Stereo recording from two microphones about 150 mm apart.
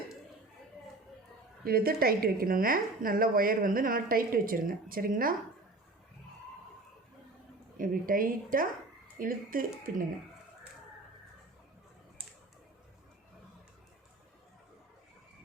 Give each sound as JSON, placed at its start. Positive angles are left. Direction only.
{"t": 1.6, "sound": "a woman's voice", "side_deg": -90}
{"t": 7.8, "sound": "a woman's voice", "side_deg": -70}